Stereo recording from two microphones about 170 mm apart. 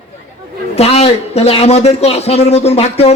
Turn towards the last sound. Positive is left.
turn(degrees=35)  # may be behind; listen again after turning